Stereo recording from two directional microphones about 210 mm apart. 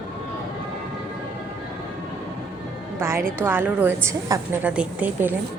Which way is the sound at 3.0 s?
10° right (ahead or behind).